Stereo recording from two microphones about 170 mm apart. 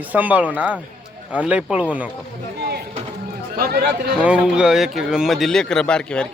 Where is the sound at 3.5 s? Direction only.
60° right (ahead or behind).